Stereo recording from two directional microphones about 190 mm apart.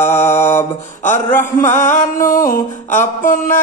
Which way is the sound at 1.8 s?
40° left (ahead or behind).